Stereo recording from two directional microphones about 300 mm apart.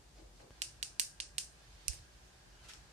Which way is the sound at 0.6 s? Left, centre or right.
Right.